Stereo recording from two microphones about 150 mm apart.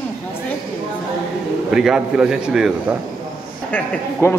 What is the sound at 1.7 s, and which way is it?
Speech, 5° right (ahead or behind).